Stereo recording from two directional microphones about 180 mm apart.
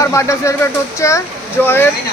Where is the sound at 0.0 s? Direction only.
15° left (ahead or behind).